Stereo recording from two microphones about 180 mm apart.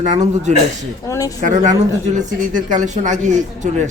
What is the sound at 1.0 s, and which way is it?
Speech, 15° left (ahead or behind).